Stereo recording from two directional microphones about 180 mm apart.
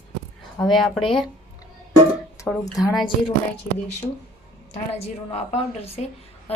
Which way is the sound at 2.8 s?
Centre (ahead or behind).